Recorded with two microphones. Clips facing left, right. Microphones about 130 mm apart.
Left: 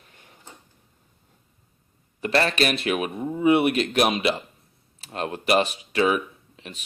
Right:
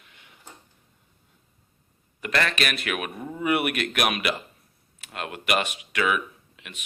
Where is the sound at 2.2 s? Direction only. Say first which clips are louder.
Left 4 dB; 30° left (ahead or behind).